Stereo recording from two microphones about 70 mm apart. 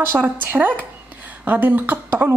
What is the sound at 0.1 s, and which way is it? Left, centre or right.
A woman's voice, right.